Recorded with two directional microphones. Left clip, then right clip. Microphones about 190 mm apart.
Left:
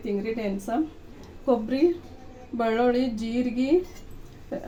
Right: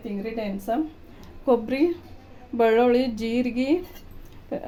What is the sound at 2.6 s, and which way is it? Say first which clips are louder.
Speech: right 4 dB; 50° right (ahead or behind).